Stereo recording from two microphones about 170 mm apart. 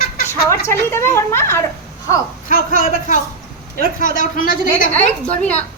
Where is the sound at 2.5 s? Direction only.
55° left (ahead or behind).